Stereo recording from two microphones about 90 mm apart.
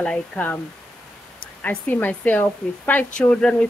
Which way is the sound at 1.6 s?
20° left (ahead or behind).